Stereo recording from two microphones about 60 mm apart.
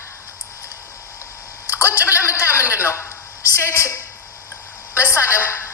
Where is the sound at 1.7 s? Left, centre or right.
Left.